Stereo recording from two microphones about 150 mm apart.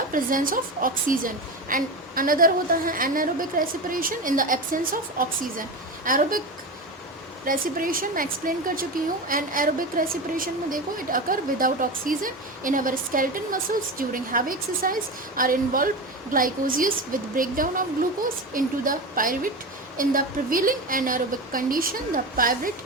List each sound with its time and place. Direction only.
0.1 s a woman's voice: 65° right (ahead or behind)
7.4 s a woman's voice: 70° right (ahead or behind)